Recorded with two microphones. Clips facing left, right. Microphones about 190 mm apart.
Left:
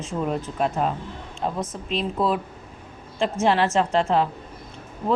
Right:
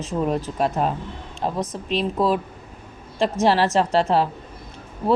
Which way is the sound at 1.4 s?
35° right (ahead or behind).